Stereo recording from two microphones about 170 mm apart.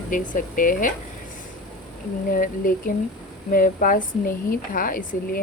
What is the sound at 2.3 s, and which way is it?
Speech, 55° left (ahead or behind).